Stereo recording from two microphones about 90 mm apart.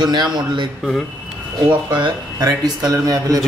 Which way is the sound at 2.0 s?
45° right (ahead or behind).